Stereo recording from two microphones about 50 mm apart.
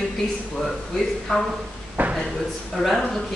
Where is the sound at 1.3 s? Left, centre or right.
Centre.